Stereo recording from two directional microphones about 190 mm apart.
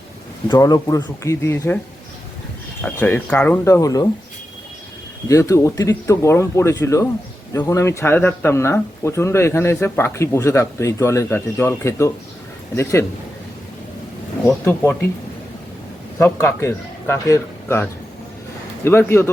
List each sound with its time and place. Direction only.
0.4 s speech: 20° left (ahead or behind)
2.8 s speech: 10° left (ahead or behind)
5.3 s speech: 15° left (ahead or behind)
14.4 s speech: 10° left (ahead or behind)
16.1 s a man's voice: 15° left (ahead or behind)
18.9 s speech: 10° left (ahead or behind)